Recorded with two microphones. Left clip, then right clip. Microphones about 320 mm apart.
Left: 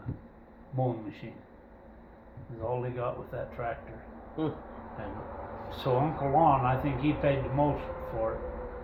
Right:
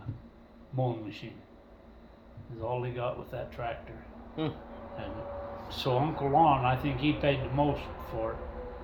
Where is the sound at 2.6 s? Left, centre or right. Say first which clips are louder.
Left 1 dB; centre.